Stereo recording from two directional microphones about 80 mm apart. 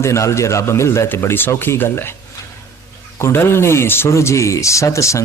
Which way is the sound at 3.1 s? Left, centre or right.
Left.